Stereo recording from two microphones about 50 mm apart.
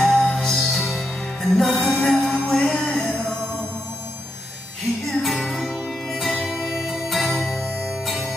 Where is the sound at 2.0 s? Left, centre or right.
Centre.